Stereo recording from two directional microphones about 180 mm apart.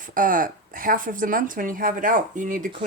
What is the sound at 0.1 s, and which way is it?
Speech, 50° right (ahead or behind).